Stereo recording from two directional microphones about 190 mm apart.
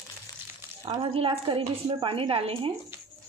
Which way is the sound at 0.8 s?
30° right (ahead or behind).